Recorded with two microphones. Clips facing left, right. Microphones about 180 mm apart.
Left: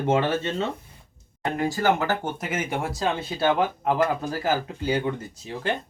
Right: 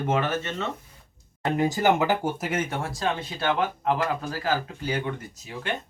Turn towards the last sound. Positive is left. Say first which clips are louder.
# left 5 dB
turn(degrees=30)  # may be behind; listen again after turning